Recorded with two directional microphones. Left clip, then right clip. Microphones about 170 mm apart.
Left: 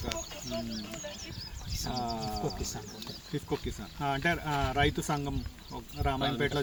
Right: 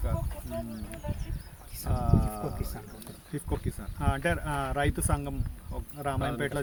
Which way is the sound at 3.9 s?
10° right (ahead or behind).